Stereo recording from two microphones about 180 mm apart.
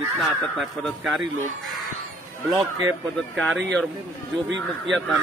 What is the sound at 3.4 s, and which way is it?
Speech, 5° left (ahead or behind).